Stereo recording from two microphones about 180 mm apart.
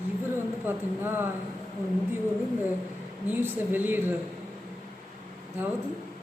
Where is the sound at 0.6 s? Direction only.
10° right (ahead or behind).